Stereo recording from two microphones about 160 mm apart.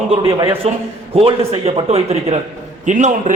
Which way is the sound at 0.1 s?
30° right (ahead or behind).